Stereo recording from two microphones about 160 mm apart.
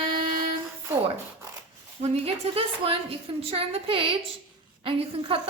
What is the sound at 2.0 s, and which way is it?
A woman's voice, 40° right (ahead or behind).